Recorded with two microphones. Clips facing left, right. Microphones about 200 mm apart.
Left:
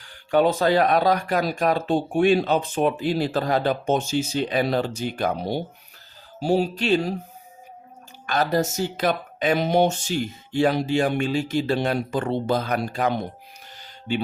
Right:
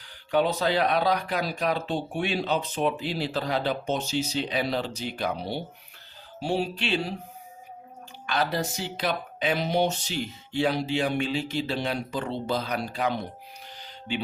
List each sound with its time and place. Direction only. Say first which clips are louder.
0.0 s speech: left 5 dB; 45° left (ahead or behind)
6.4 s music: left 6 dB; 40° left (ahead or behind)
8.3 s speech: left 5 dB; 45° left (ahead or behind)